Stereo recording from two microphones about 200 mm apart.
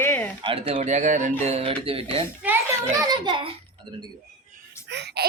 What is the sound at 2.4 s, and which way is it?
A child's voice, 10° right (ahead or behind).